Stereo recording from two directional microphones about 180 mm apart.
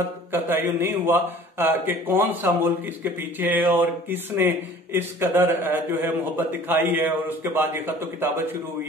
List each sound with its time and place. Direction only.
0.3 s a man's voice: 10° right (ahead or behind)